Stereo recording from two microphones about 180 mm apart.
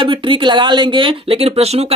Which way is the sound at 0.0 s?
30° right (ahead or behind).